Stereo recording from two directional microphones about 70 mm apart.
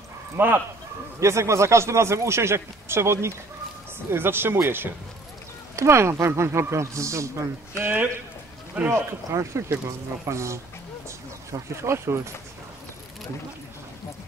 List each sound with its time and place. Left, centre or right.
0.4 s speech: right
1.2 s speech: right
8.9 s speech: right